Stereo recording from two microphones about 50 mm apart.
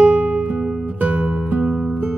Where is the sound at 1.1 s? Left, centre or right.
Centre.